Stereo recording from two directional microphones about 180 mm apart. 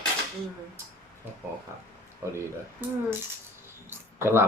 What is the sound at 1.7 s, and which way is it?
Speech, 15° right (ahead or behind).